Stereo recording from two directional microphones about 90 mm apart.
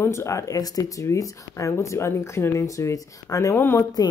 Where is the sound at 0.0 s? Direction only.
30° left (ahead or behind).